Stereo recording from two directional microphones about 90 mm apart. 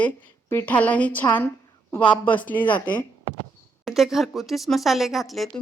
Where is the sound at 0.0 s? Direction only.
20° left (ahead or behind).